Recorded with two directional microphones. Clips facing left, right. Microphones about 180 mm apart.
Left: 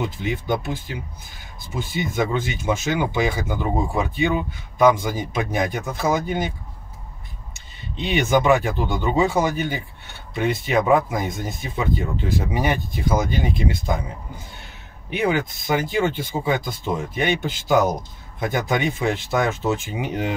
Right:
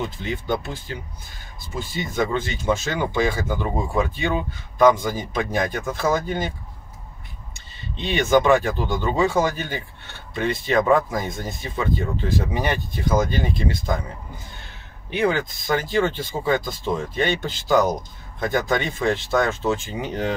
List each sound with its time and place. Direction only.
0.2 s speech: 10° left (ahead or behind)
2.1 s speech: 10° left (ahead or behind)
8.0 s speech: 10° left (ahead or behind)
15.1 s speech: 15° left (ahead or behind)